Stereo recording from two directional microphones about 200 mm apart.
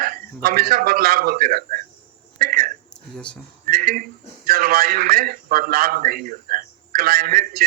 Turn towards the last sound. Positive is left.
turn(degrees=-50)  # may be behind; listen again after turning